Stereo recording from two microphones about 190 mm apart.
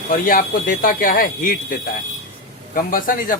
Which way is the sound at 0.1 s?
45° left (ahead or behind).